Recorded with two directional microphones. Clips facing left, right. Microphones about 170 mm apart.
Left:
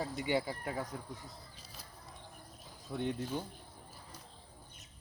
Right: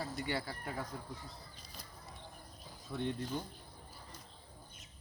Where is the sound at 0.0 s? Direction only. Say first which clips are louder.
Left 5 dB; 15° left (ahead or behind).